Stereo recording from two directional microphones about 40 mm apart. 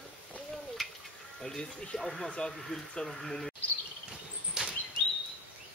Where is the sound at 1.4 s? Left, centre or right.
Centre.